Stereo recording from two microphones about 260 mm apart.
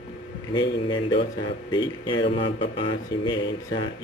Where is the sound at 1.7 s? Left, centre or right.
Centre.